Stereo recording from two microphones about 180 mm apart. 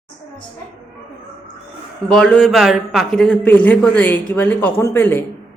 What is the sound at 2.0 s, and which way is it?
A man's voice, 5° left (ahead or behind).